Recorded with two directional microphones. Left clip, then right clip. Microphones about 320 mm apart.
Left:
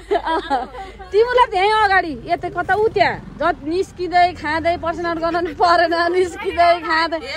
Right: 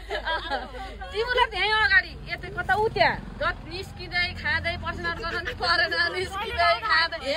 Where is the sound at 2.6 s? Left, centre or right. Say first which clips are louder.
Left 5 dB; left.